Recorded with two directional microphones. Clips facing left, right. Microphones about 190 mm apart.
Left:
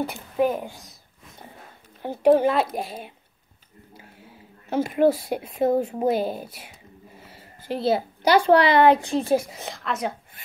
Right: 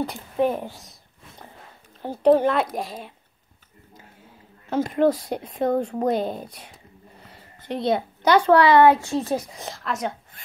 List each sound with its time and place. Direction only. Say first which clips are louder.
0.1 s speech: even; 5° left (ahead or behind)
2.0 s speech: even; 10° left (ahead or behind)
4.7 s speech: even; 10° left (ahead or behind)
7.2 s a sound: left 1 dB; 5° left (ahead or behind)
8.7 s speech: right 1 dB; 15° left (ahead or behind); by 10.1 s centre (ahead or behind)